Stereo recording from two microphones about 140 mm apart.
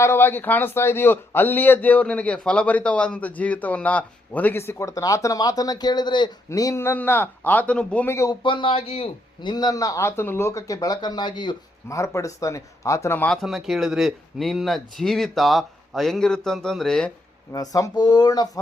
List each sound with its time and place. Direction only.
0.0 s a man's voice: 15° left (ahead or behind)
8.1 s a man's voice: 20° left (ahead or behind)
8.4 s a man's voice: 40° left (ahead or behind)
11.9 s a man's voice: 20° left (ahead or behind)
13.4 s speech: centre (ahead or behind)
17.5 s a man's voice: 25° left (ahead or behind)